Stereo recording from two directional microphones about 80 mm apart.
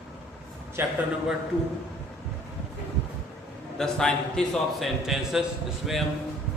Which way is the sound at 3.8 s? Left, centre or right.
Centre.